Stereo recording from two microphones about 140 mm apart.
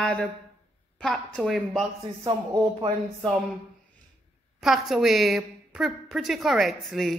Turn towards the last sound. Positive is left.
turn(degrees=0)  # may be behind; listen again after turning